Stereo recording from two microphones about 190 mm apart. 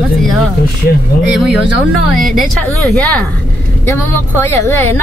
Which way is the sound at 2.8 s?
5° left (ahead or behind).